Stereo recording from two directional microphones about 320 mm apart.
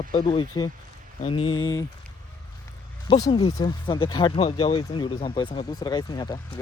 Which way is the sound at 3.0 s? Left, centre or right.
Centre.